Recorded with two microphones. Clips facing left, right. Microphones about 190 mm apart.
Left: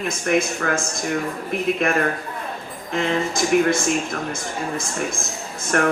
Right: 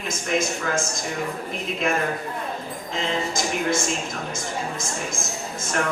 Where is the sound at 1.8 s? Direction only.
60° left (ahead or behind).